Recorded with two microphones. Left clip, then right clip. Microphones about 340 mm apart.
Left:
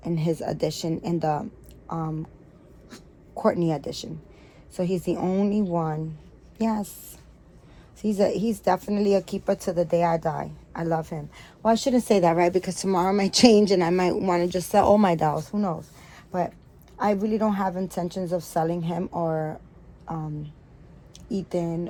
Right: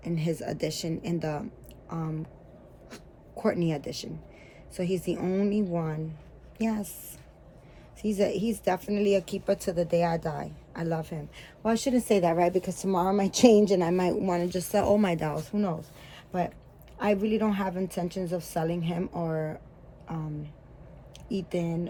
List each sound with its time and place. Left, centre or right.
0.0 s speech: centre
3.3 s speech: centre
8.0 s speech: centre
17.0 s speech: centre
21.5 s speech: centre